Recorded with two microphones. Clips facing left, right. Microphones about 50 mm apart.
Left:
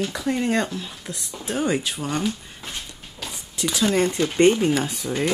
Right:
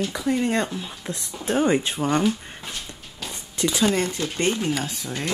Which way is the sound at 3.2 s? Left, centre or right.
Centre.